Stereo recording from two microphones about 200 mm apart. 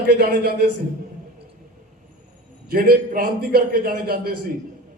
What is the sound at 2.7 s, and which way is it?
A man's voice, 50° right (ahead or behind).